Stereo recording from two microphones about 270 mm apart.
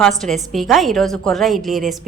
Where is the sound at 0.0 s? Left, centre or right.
Centre.